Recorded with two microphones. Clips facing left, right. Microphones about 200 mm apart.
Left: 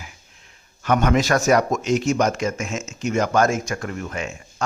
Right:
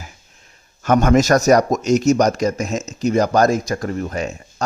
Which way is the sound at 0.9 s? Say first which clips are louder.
Right 5 dB; 45° right (ahead or behind).